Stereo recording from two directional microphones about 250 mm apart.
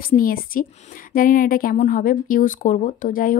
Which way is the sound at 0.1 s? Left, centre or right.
Left.